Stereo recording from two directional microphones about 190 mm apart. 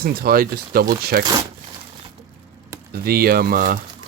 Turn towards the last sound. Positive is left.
turn(degrees=-45)  # may be behind; listen again after turning